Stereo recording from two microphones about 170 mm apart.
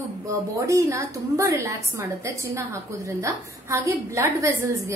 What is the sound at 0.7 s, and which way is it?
A woman's voice, 15° right (ahead or behind).